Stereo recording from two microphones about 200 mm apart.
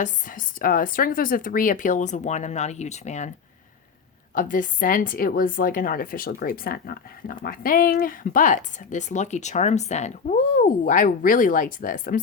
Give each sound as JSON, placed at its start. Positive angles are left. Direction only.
{"t": 0.0, "sound": "speech", "side_deg": 40}
{"t": 4.4, "sound": "a woman's voice", "side_deg": 40}